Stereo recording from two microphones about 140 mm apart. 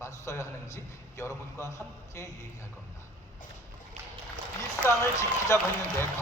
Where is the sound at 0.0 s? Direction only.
20° left (ahead or behind).